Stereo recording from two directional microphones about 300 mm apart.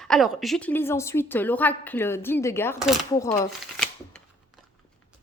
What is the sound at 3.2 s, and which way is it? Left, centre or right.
Speech, centre.